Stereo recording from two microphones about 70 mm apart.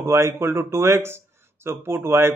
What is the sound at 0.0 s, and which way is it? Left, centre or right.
Speech, right.